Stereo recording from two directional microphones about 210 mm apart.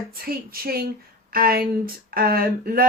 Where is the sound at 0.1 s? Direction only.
45° right (ahead or behind).